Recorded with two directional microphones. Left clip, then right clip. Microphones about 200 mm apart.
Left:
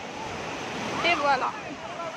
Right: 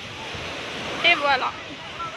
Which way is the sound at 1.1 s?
Centre (ahead or behind).